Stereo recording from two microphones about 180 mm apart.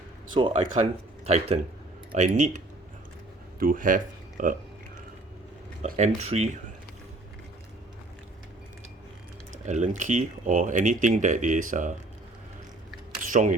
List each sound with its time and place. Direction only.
0.3 s speech: 30° right (ahead or behind)
3.6 s speech: 50° right (ahead or behind)
5.8 s speech: 40° right (ahead or behind)
9.6 s speech: 40° right (ahead or behind)
13.2 s a sound: 50° right (ahead or behind)